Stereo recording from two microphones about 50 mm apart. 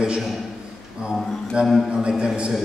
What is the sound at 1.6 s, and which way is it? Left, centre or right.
Speech, right.